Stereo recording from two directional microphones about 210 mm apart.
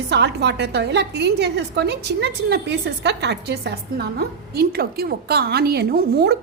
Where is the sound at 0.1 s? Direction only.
55° right (ahead or behind).